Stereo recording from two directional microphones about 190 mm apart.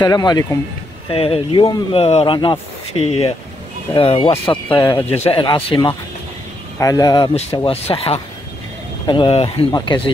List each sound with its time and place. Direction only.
0.0 s speech: 20° left (ahead or behind)
1.0 s speech: 30° left (ahead or behind)